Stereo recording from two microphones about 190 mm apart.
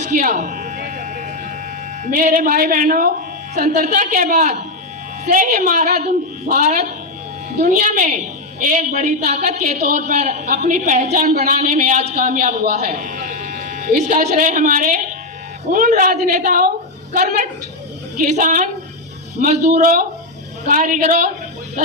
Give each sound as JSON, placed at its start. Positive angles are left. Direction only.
{"t": 0.0, "sound": "speech", "side_deg": -40}
{"t": 0.9, "sound": "a sound", "side_deg": -40}
{"t": 2.0, "sound": "a man's voice", "side_deg": -45}